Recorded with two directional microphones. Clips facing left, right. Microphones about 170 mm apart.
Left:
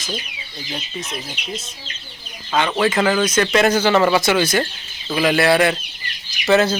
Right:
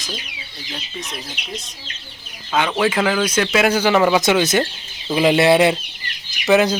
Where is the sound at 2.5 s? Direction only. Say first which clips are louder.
Even; 5° right (ahead or behind).